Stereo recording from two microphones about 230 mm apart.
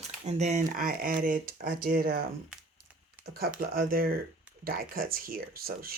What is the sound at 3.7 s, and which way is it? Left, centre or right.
Speech, right.